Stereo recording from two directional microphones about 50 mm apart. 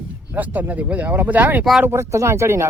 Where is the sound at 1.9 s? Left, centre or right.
Right.